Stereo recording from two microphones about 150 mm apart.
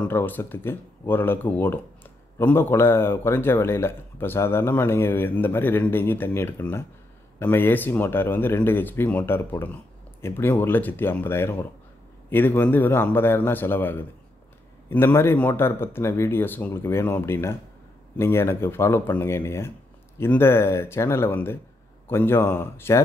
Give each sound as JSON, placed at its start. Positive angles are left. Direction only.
{"t": 0.0, "sound": "a man's voice", "side_deg": 15}